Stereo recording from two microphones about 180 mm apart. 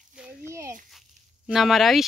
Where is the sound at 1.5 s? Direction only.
Centre (ahead or behind).